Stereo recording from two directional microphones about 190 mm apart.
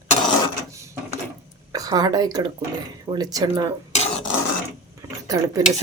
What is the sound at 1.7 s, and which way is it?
A woman's voice, 20° right (ahead or behind).